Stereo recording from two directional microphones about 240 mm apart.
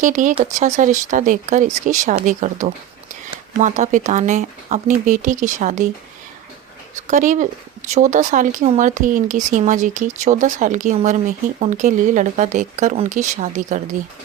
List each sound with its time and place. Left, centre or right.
0.0 s speech: right
6.9 s speech: right